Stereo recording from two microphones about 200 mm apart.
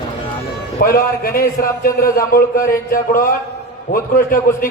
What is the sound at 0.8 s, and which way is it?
A man's voice, 45° left (ahead or behind).